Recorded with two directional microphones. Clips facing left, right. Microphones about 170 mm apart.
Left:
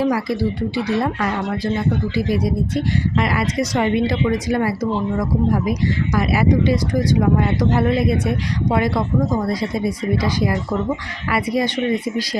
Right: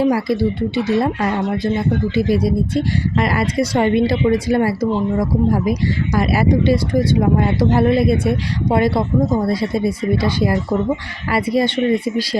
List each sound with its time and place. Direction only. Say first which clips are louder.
0.0 s speech: right 3 dB; 25° right (ahead or behind)